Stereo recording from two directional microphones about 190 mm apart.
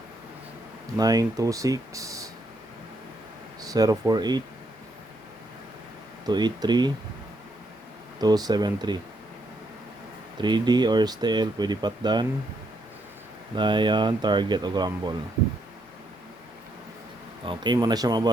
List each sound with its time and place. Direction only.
0.9 s speech: 20° right (ahead or behind)
3.6 s speech: 20° right (ahead or behind)
6.2 s speech: 20° right (ahead or behind)
8.2 s speech: 20° right (ahead or behind)
10.4 s speech: 20° right (ahead or behind)
13.6 s speech: 25° right (ahead or behind)
17.4 s speech: 25° right (ahead or behind)